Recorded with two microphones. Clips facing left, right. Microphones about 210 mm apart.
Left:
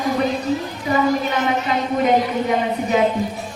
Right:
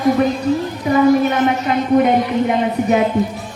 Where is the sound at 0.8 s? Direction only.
50° right (ahead or behind).